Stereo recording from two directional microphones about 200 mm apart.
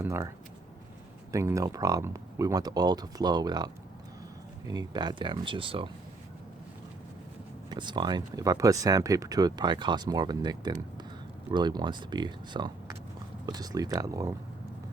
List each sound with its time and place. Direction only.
0.0 s speech: 15° right (ahead or behind)
1.3 s speech: 15° right (ahead or behind)
4.7 s speech: 20° right (ahead or behind)
7.7 s speech: 20° right (ahead or behind)